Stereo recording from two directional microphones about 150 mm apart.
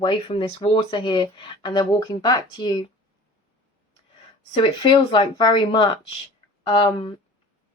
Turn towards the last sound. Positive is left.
turn(degrees=35)  # may be behind; listen again after turning